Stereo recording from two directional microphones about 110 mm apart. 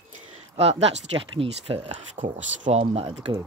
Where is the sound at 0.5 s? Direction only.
65° right (ahead or behind); by 2.0 s 50° right (ahead or behind).